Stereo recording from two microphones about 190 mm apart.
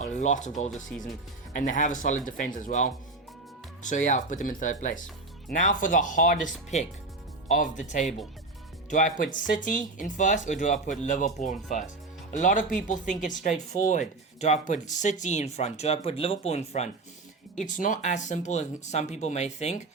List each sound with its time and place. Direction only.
0.0 s speech: 40° left (ahead or behind)
0.7 s speech: centre (ahead or behind)
1.5 s speech: 40° left (ahead or behind)